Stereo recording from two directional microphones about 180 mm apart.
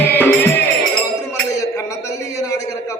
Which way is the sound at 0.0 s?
10° left (ahead or behind).